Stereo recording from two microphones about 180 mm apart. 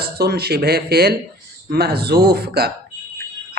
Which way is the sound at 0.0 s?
60° right (ahead or behind).